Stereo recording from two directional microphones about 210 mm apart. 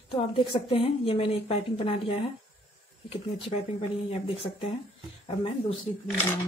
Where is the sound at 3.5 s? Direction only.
30° left (ahead or behind).